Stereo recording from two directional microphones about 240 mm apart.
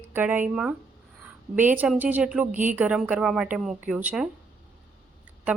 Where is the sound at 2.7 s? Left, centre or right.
Centre.